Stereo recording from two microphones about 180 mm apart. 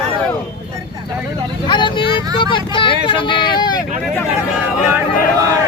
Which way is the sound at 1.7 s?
25° left (ahead or behind).